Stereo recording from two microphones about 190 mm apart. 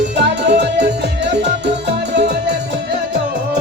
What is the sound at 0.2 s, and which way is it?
Music, 65° right (ahead or behind).